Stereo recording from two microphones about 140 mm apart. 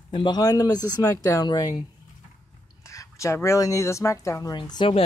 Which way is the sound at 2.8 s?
20° left (ahead or behind).